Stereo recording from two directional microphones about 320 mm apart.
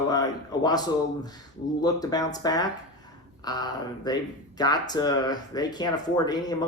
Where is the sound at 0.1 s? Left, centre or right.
Centre.